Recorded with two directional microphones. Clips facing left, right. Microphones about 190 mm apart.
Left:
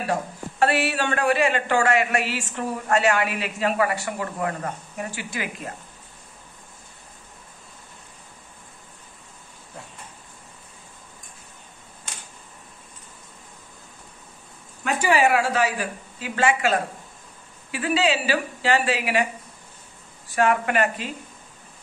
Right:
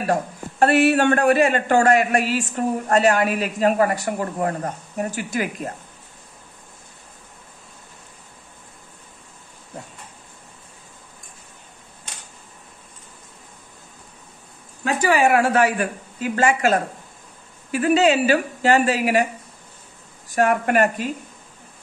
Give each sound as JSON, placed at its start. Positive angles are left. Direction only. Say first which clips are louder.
{"t": 0.0, "sound": "speech", "louder": "right 4 dB", "side_deg": -50}
{"t": 15.1, "sound": "speech", "louder": "right 4 dB", "side_deg": -55}
{"t": 20.3, "sound": "speech", "louder": "right 3 dB", "side_deg": -45}